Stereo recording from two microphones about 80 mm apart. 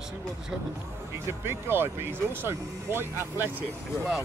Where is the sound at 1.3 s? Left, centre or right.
Right.